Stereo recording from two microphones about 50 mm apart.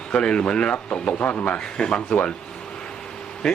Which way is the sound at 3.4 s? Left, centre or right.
Centre.